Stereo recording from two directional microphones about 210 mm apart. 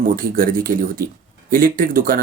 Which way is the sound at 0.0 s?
40° right (ahead or behind).